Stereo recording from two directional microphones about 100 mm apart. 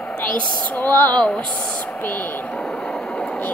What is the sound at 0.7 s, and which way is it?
Speech, 20° left (ahead or behind).